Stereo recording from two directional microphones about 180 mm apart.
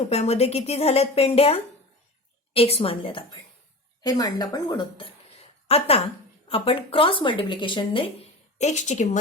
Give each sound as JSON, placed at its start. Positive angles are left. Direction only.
{"t": 0.1, "sound": "a woman's voice", "side_deg": 35}
{"t": 4.9, "sound": "a sound", "side_deg": 35}
{"t": 6.5, "sound": "speech", "side_deg": 30}